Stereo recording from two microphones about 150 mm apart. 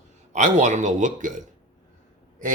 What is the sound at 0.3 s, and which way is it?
Speech, 50° right (ahead or behind).